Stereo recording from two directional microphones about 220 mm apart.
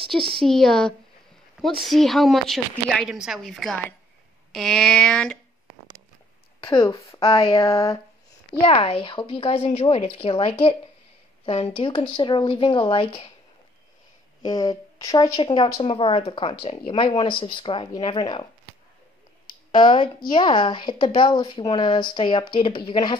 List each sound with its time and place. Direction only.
0.4 s a woman's voice: centre (ahead or behind)
6.6 s a woman's voice: 20° left (ahead or behind)
7.5 s a sound: 15° left (ahead or behind)
8.5 s a woman's voice: 20° left (ahead or behind)
14.4 s a woman's voice: 20° left (ahead or behind)
19.7 s a woman's voice: 20° left (ahead or behind)